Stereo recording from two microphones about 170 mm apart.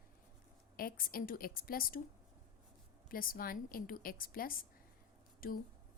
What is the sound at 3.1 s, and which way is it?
Speech, 60° left (ahead or behind).